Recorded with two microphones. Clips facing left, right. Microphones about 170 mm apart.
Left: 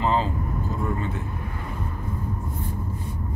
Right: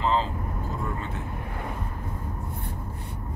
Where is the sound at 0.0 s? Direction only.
10° left (ahead or behind).